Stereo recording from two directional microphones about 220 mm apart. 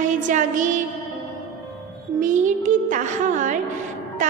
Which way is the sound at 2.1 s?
35° right (ahead or behind).